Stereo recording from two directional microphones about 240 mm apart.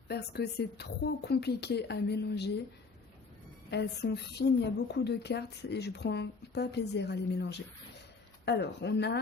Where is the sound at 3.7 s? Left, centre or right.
Left.